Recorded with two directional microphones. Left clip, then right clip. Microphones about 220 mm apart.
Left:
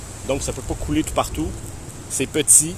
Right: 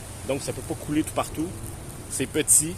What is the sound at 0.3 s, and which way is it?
Speech, 25° left (ahead or behind).